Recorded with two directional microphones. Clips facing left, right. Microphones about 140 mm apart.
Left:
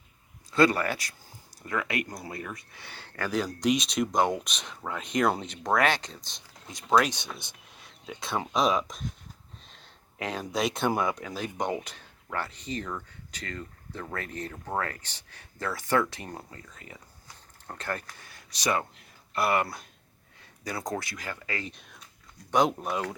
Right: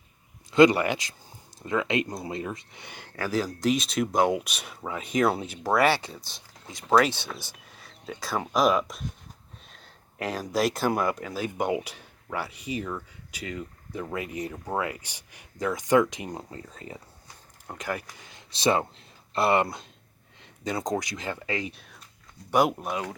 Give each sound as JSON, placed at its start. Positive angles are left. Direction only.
{"t": 0.5, "sound": "speech", "side_deg": -20}
{"t": 17.7, "sound": "speech", "side_deg": -10}
{"t": 21.6, "sound": "speech", "side_deg": -5}